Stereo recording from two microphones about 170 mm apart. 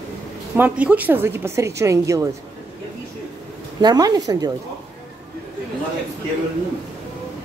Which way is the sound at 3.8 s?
20° right (ahead or behind).